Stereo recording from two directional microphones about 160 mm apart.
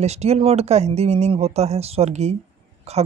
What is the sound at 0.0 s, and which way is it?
Speech, 40° right (ahead or behind).